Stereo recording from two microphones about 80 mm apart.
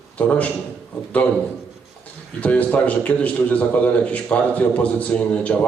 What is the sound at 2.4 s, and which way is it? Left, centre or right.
A man's voice, centre.